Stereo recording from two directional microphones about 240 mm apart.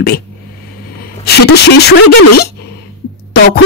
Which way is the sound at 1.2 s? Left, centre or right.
Left.